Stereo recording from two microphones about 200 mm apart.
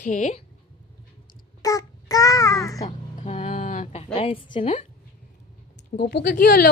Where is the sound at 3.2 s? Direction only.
35° left (ahead or behind).